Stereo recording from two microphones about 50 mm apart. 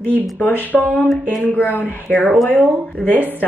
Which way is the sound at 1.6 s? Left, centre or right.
Left.